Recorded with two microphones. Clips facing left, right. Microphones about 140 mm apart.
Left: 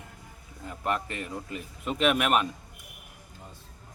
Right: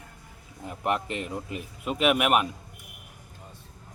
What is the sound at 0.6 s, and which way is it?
A man's voice, 20° right (ahead or behind).